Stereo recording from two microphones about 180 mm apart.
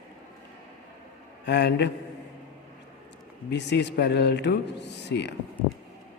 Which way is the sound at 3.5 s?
75° left (ahead or behind).